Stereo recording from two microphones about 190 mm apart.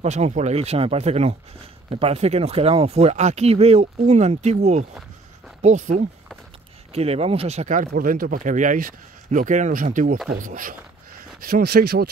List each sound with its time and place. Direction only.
0.0 s speech: 35° right (ahead or behind)
7.9 s speech: 50° right (ahead or behind)